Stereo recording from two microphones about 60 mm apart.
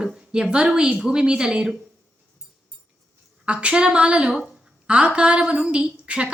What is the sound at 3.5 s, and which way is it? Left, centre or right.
A woman's voice, centre.